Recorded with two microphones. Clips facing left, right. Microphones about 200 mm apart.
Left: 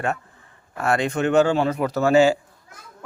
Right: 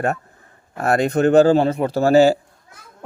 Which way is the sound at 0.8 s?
40° right (ahead or behind).